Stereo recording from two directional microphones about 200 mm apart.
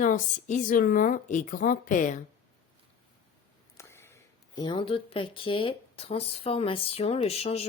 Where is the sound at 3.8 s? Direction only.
15° left (ahead or behind).